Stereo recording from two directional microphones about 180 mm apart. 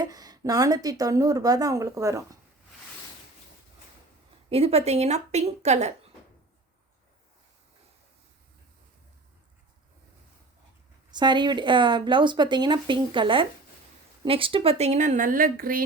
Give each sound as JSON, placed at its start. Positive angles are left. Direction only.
{"t": 0.0, "sound": "a woman's voice", "side_deg": -20}
{"t": 4.4, "sound": "a woman's voice", "side_deg": -35}
{"t": 11.1, "sound": "a woman's voice", "side_deg": -25}